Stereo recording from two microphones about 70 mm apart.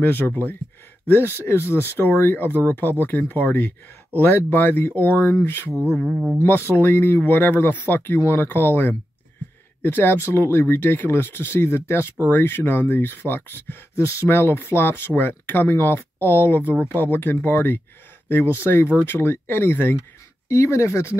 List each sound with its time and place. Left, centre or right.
0.0 s speech: left
6.0 s speech: centre
6.4 s speech: left
20.4 s speech: left